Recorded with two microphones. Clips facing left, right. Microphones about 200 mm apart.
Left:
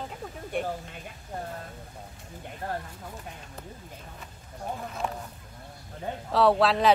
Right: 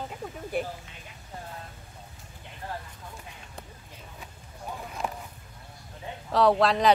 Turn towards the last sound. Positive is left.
turn(degrees=0)  # may be behind; listen again after turning